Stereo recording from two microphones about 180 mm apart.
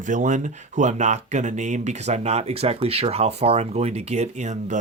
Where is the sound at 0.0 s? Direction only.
45° right (ahead or behind).